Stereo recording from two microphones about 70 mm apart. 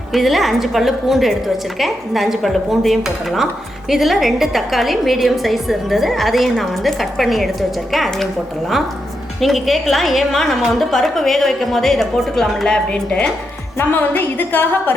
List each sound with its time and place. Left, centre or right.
0.1 s a woman's voice: centre
9.4 s a woman's voice: centre
13.7 s a woman's voice: left